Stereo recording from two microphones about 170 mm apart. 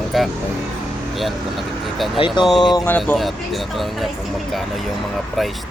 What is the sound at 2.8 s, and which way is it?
Speech, 10° left (ahead or behind).